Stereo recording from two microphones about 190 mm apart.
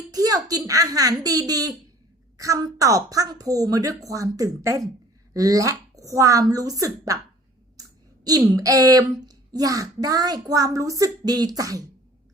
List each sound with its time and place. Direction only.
0.1 s a woman's voice: 20° right (ahead or behind)
8.2 s a woman's voice: 20° right (ahead or behind)